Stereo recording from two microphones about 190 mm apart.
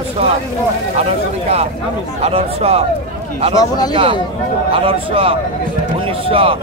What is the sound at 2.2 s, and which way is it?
Speech, 30° right (ahead or behind).